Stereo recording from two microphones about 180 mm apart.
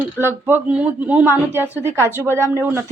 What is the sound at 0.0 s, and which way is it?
Speech, 10° right (ahead or behind).